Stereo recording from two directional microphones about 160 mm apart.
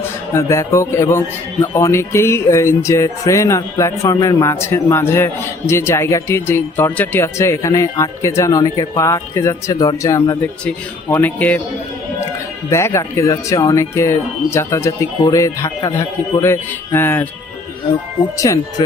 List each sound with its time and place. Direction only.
0.3 s speech: 20° left (ahead or behind)
12.7 s speech: 15° left (ahead or behind)
18.3 s speech: 20° left (ahead or behind)